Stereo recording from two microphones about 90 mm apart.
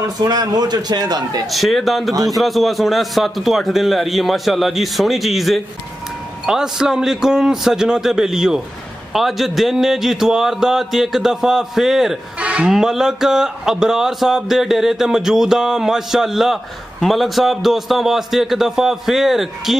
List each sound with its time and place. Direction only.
0.2 s a man's voice: 50° right (ahead or behind)
1.5 s speech: centre (ahead or behind)
12.4 s bleat: 15° right (ahead or behind)
12.7 s speech: 5° right (ahead or behind)